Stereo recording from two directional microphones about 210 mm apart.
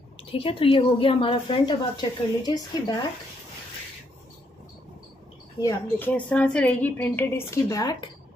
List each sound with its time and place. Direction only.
0.3 s a woman's voice: 25° left (ahead or behind)
5.6 s a woman's voice: 15° left (ahead or behind)